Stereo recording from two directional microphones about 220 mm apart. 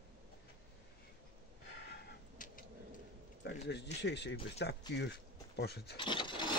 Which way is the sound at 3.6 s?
50° left (ahead or behind).